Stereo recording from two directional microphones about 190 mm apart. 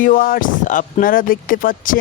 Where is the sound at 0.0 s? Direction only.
45° left (ahead or behind).